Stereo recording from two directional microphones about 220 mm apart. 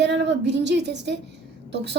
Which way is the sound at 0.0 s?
50° right (ahead or behind).